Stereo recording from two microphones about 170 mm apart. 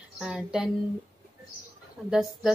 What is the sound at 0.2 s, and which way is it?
Speech, 5° right (ahead or behind).